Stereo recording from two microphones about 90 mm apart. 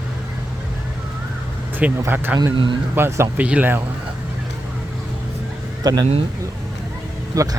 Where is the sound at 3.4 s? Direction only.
15° right (ahead or behind).